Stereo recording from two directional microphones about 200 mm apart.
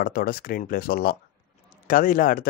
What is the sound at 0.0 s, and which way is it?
Speech, 45° left (ahead or behind).